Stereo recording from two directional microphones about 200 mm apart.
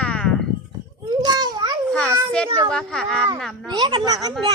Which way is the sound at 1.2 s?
20° right (ahead or behind).